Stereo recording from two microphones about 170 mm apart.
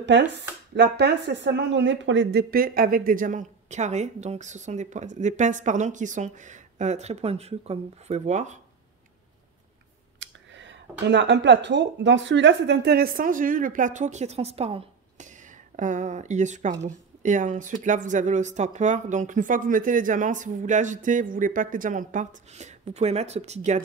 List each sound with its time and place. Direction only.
0.0 s speech: 90° right; by 8.5 s 45° right (ahead or behind)
10.1 s speech: 90° right; by 23.8 s 40° right (ahead or behind)